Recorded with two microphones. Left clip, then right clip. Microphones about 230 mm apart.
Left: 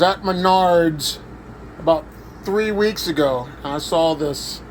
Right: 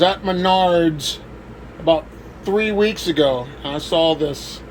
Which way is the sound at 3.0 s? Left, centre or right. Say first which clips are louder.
Right 2 dB; centre.